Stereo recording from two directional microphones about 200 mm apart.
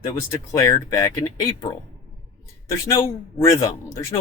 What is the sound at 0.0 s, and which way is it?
Speech, 15° left (ahead or behind).